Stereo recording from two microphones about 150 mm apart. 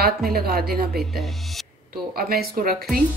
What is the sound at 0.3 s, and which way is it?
A woman's voice, 85° right.